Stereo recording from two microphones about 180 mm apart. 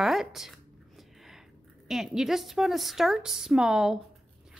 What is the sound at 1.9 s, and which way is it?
Speech, centre (ahead or behind).